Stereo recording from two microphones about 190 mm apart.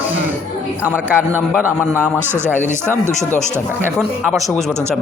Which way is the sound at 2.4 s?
10° left (ahead or behind).